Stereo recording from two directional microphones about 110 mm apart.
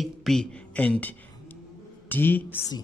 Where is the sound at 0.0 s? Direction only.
5° left (ahead or behind).